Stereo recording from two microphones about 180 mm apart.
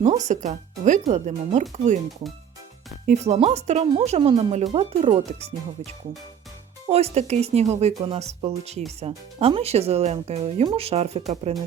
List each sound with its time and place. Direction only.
0.0 s speech: 40° right (ahead or behind)
3.1 s speech: 35° right (ahead or behind)